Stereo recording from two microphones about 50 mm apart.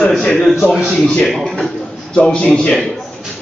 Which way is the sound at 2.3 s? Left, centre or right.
Centre.